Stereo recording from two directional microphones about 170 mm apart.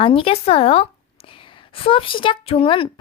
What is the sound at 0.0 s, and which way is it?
A woman's voice, 30° left (ahead or behind).